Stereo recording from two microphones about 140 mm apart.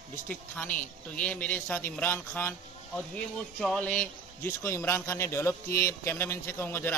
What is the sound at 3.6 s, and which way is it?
A man's voice, 5° left (ahead or behind).